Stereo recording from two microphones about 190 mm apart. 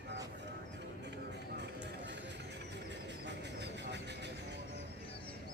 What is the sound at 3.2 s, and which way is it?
Vehicle, 65° right (ahead or behind).